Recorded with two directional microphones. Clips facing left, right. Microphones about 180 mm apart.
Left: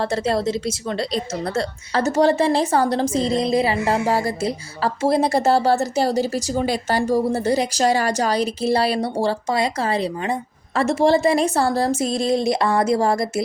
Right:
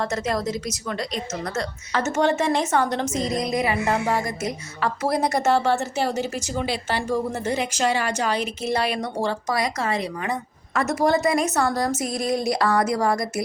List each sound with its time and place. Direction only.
0.0 s a woman's voice: 30° left (ahead or behind)